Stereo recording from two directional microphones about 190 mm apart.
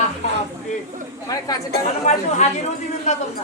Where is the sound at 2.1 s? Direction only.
35° left (ahead or behind).